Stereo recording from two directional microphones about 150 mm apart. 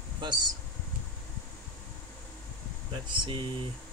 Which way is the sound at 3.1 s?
30° right (ahead or behind).